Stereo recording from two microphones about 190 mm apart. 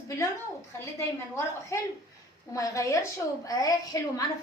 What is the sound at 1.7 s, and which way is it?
A woman's voice, 15° left (ahead or behind).